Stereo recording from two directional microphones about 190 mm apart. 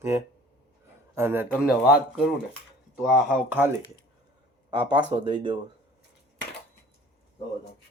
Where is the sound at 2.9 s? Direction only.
Centre (ahead or behind).